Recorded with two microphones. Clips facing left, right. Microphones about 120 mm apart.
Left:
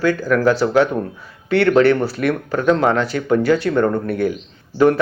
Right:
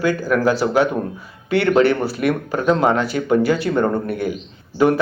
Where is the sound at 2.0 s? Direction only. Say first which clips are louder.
Even; 5° right (ahead or behind).